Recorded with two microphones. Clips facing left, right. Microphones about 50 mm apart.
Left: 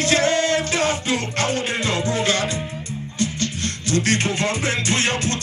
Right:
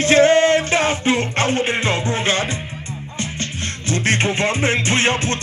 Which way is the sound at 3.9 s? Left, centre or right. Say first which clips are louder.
Right 2 dB; right.